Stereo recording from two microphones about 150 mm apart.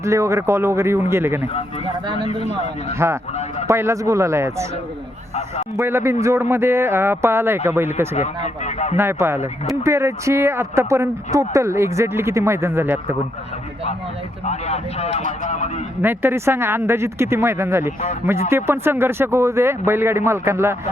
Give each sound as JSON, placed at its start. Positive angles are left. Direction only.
{"t": 0.0, "sound": "speech", "side_deg": -20}
{"t": 3.0, "sound": "speech", "side_deg": -15}
{"t": 5.7, "sound": "speech", "side_deg": -15}
{"t": 8.1, "sound": "speech", "side_deg": 50}
{"t": 9.0, "sound": "speech", "side_deg": -15}
{"t": 14.4, "sound": "a man's voice", "side_deg": 45}
{"t": 16.0, "sound": "speech", "side_deg": -15}